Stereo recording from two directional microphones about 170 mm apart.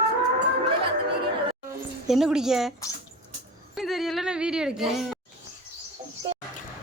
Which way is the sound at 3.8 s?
Centre (ahead or behind).